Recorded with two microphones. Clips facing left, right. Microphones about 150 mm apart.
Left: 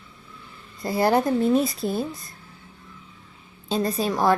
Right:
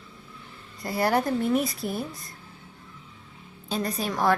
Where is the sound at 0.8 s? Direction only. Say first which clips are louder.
Left 4 dB; 25° left (ahead or behind).